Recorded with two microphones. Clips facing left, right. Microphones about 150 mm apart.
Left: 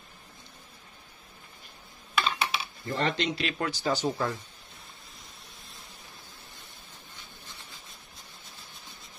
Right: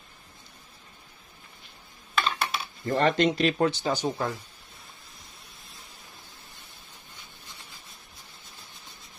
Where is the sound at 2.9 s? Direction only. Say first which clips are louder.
Right 6 dB; 45° right (ahead or behind).